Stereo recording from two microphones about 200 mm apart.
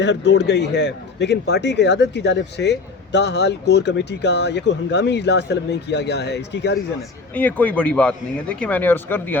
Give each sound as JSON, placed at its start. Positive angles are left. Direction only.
{"t": 0.0, "sound": "a man's voice", "side_deg": 60}
{"t": 7.3, "sound": "speech", "side_deg": 10}